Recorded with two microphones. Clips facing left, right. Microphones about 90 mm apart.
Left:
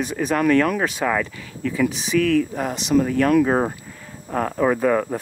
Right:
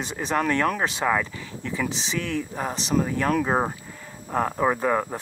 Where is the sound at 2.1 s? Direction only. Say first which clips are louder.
Left 11 dB; 25° right (ahead or behind).